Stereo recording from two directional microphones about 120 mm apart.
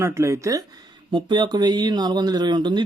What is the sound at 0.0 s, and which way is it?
Speech, 25° right (ahead or behind).